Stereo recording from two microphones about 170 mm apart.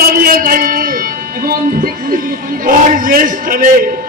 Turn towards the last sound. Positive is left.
turn(degrees=-55)  # may be behind; listen again after turning